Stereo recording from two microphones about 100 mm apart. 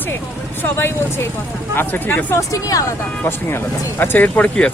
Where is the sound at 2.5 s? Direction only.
35° left (ahead or behind).